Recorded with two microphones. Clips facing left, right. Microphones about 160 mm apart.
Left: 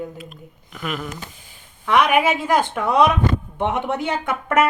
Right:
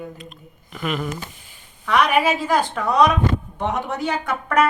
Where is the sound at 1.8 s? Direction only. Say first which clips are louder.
Left 1 dB; 20° left (ahead or behind).